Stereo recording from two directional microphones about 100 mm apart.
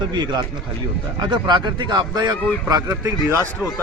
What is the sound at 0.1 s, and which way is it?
A man's voice, 50° right (ahead or behind).